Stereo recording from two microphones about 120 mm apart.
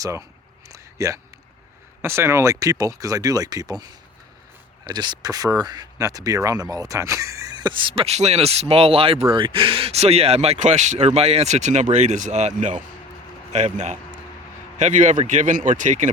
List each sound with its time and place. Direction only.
0.0 s speech: 30° right (ahead or behind)
0.7 s a sound: 25° right (ahead or behind)
2.0 s speech: 20° right (ahead or behind)
4.9 s speech: 35° right (ahead or behind)
7.5 s speech: 40° right (ahead or behind); by 16.0 s 90° right